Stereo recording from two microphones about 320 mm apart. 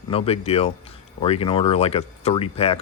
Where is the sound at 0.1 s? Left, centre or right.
Centre.